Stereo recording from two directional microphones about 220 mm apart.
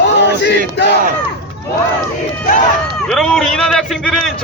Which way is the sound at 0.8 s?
50° left (ahead or behind).